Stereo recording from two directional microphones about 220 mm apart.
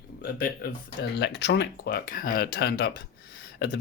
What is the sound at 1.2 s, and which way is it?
Speech, 50° left (ahead or behind).